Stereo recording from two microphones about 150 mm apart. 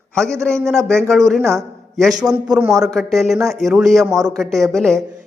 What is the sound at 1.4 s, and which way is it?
Speech, 20° right (ahead or behind).